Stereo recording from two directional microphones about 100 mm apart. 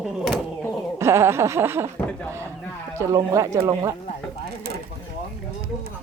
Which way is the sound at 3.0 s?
30° right (ahead or behind).